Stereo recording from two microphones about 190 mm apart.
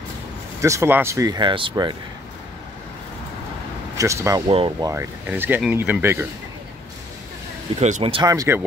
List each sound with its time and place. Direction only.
0.6 s speech: 15° right (ahead or behind)
4.0 s speech: 15° right (ahead or behind)
4.5 s speech: 25° right (ahead or behind); by 6.2 s 10° right (ahead or behind)
7.8 s speech: 35° right (ahead or behind); by 8.6 s 15° right (ahead or behind)